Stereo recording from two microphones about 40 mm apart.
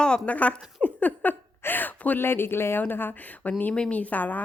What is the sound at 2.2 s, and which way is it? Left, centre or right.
Speech, left.